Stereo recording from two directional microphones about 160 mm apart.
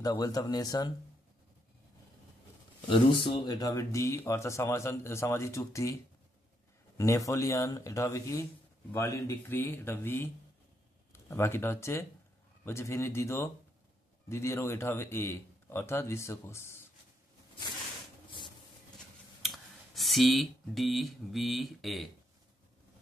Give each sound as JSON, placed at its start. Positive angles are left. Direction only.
{"t": 0.0, "sound": "speech", "side_deg": 25}
{"t": 2.9, "sound": "speech", "side_deg": 30}
{"t": 7.0, "sound": "a man's voice", "side_deg": 20}
{"t": 19.4, "sound": "speech", "side_deg": 0}